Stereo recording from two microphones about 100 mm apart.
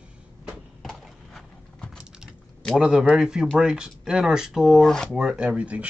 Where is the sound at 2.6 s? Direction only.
5° right (ahead or behind).